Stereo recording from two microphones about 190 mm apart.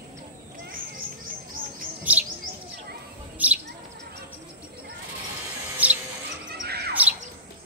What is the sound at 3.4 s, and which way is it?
Bird, 10° right (ahead or behind).